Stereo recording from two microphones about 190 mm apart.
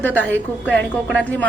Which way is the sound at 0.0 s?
10° left (ahead or behind).